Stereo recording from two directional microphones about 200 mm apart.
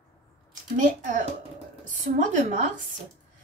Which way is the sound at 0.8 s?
40° right (ahead or behind).